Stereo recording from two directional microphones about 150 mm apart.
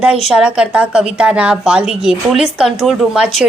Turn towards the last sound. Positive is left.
turn(degrees=-5)  # may be behind; listen again after turning